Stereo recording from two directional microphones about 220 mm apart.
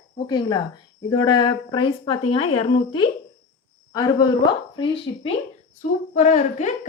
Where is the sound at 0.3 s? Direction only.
20° left (ahead or behind).